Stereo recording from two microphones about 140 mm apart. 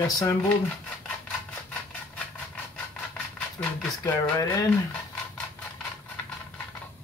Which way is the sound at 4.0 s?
25° left (ahead or behind).